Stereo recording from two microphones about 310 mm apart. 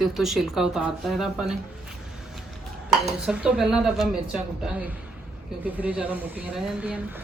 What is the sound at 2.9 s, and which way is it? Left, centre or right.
Speech, centre.